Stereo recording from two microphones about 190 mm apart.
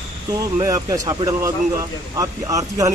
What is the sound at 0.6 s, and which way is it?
Speech, 20° right (ahead or behind).